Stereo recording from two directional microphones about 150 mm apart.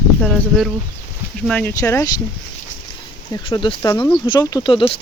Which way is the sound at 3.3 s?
30° left (ahead or behind).